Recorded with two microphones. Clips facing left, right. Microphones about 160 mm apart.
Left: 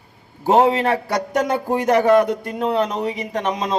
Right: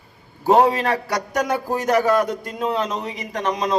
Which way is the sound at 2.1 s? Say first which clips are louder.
Left 4 dB; 60° left (ahead or behind).